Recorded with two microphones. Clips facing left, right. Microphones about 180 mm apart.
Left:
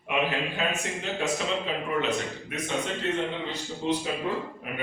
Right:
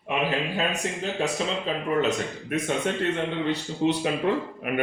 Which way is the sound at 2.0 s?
50° right (ahead or behind).